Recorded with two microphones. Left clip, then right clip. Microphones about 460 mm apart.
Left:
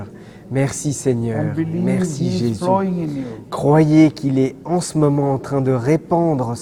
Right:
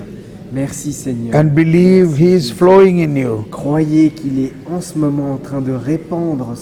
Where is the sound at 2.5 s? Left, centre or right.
Right.